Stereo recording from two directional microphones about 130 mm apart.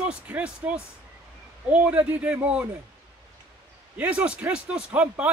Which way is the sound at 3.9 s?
10° right (ahead or behind).